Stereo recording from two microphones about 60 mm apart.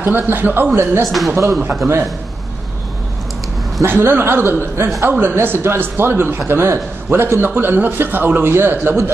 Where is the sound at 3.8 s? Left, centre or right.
Right.